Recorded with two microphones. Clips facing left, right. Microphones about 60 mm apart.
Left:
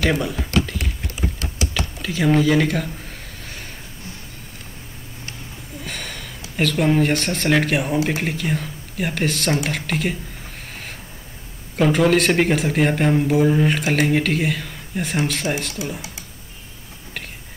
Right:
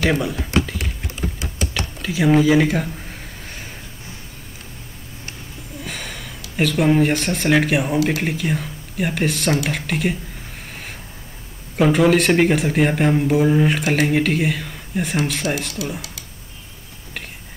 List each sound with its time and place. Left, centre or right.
0.0 s speech: centre
0.6 s typing: centre
1.6 s a sound: centre
5.8 s gasp: centre
6.5 s speech: centre
11.7 s speech: centre
15.8 s speech: left